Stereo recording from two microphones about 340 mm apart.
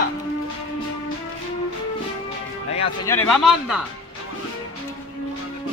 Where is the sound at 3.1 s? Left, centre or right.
Centre.